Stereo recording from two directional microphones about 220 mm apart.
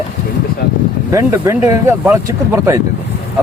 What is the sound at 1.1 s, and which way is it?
Speech, 15° right (ahead or behind).